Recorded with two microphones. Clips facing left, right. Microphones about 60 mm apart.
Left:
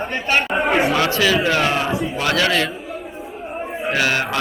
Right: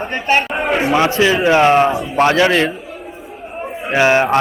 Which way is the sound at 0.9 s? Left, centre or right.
Right.